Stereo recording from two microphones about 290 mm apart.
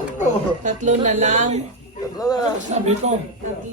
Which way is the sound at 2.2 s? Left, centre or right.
Centre.